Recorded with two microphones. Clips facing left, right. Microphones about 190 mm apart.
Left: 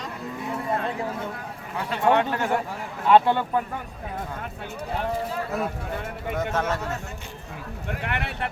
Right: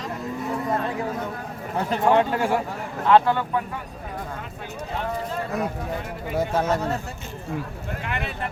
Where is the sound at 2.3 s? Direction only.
10° right (ahead or behind).